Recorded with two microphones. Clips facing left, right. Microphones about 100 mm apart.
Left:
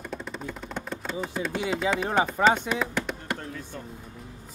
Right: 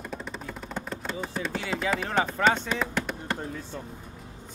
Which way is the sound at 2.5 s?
10° left (ahead or behind).